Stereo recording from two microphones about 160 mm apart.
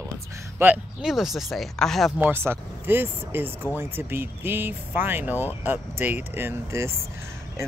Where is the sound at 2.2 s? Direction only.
15° right (ahead or behind).